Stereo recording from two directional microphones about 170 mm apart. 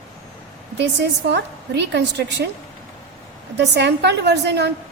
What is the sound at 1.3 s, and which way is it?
A woman's voice, 85° right.